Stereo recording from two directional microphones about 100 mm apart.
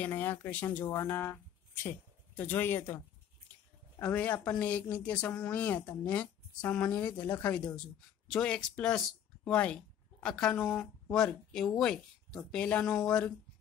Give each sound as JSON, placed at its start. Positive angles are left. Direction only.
{"t": 0.0, "sound": "speech", "side_deg": 20}
{"t": 4.0, "sound": "speech", "side_deg": 15}
{"t": 8.3, "sound": "speech", "side_deg": 5}